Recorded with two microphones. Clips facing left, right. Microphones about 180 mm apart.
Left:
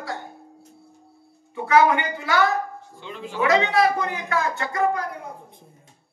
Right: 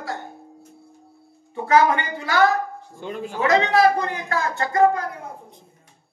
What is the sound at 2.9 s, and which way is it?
Speech, 45° right (ahead or behind).